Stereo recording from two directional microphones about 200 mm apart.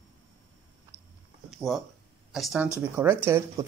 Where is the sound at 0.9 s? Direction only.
10° right (ahead or behind).